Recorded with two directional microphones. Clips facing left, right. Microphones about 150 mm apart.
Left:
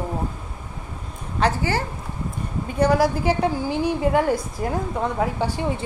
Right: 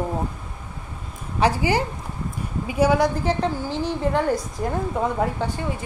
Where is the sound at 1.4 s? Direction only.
15° right (ahead or behind).